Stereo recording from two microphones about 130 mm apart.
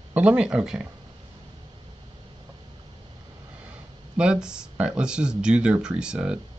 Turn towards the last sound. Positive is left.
turn(degrees=-5)  # may be behind; listen again after turning